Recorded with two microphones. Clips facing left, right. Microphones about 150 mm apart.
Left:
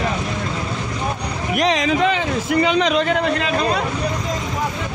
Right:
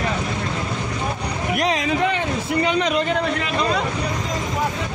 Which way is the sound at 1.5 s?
90° left.